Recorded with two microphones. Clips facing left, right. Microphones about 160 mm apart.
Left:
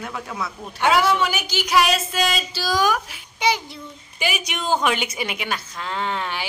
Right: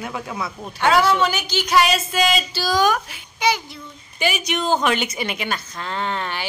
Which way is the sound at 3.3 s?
25° left (ahead or behind).